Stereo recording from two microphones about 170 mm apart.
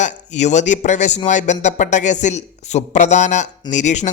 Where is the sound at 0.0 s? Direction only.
45° left (ahead or behind).